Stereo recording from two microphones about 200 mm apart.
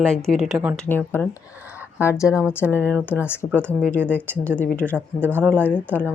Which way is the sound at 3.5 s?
10° right (ahead or behind).